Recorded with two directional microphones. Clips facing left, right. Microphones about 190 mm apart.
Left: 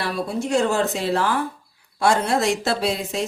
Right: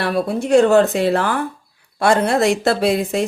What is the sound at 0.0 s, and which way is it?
Speech, 60° right (ahead or behind).